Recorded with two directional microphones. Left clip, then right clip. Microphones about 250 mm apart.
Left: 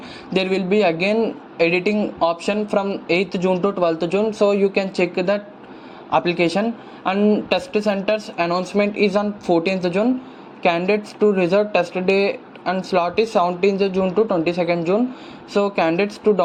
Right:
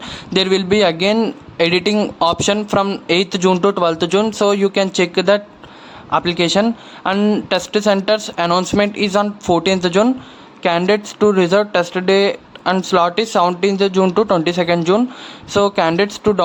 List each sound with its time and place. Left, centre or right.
0.0 s a man's voice: centre